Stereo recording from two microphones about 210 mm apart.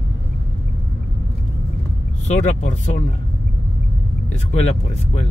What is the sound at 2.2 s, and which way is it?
Speech, 35° left (ahead or behind).